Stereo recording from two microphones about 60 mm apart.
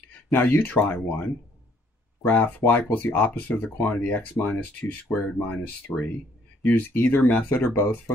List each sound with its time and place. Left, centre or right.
0.3 s speech: left
2.2 s speech: left